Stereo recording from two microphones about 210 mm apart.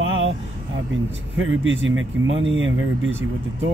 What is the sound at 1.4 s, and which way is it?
Speech, 65° right (ahead or behind).